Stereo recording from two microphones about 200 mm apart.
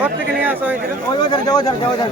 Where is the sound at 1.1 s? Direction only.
20° left (ahead or behind).